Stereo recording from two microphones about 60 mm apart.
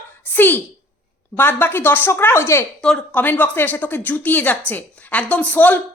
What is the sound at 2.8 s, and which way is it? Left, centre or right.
Speech, centre.